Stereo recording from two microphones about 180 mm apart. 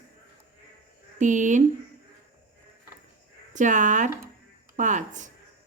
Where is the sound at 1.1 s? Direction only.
45° right (ahead or behind).